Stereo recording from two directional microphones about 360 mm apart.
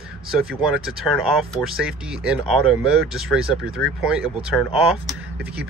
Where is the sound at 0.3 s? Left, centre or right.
Centre.